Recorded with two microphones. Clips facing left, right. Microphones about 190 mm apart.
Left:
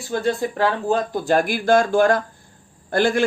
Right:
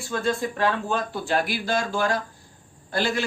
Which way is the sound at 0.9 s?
40° left (ahead or behind).